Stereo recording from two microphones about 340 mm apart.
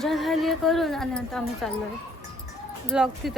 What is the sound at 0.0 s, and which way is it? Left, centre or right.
A woman's voice, centre.